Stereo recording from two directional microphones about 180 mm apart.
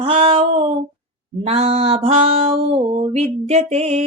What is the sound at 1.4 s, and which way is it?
Music, 35° right (ahead or behind).